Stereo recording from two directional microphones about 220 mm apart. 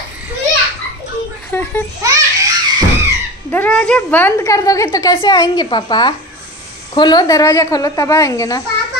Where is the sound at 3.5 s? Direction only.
5° left (ahead or behind).